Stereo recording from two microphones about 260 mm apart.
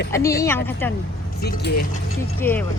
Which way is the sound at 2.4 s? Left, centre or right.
Centre.